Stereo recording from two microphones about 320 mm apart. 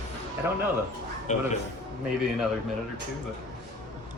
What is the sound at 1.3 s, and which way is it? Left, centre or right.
Speech, left.